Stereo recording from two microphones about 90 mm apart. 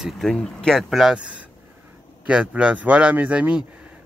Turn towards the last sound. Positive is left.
turn(degrees=-15)  # may be behind; listen again after turning